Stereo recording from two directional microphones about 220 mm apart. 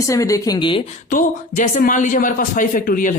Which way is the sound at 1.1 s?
35° left (ahead or behind).